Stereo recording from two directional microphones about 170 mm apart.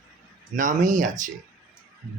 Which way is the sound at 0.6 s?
50° right (ahead or behind).